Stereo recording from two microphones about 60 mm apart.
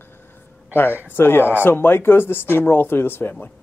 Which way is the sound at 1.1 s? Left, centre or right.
Left.